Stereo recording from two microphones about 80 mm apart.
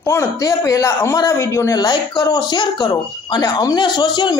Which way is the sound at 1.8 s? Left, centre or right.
Left.